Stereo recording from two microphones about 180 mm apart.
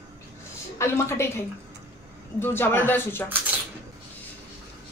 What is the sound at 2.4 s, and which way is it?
Speech, 15° left (ahead or behind).